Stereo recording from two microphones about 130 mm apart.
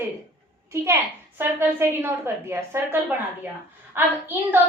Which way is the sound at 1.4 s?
15° right (ahead or behind).